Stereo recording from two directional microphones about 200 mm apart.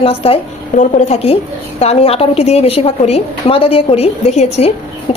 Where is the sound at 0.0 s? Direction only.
30° left (ahead or behind).